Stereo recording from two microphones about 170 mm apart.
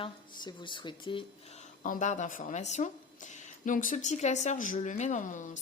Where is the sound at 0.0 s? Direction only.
30° left (ahead or behind).